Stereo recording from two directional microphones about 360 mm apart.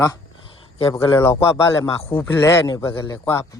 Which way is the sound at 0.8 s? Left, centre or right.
Centre.